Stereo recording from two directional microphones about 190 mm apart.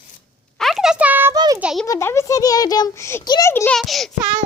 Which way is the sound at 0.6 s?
Centre (ahead or behind).